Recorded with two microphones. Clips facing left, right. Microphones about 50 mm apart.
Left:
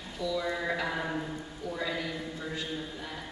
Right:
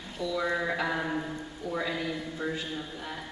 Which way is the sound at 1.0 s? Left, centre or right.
Centre.